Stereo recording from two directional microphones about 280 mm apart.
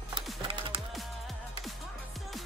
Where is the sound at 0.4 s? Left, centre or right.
Centre.